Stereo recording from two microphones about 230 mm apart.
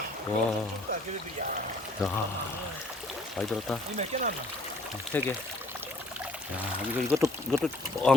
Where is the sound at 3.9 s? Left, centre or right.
Right.